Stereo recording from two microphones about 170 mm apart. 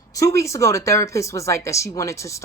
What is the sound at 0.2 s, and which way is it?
Speech, 20° left (ahead or behind).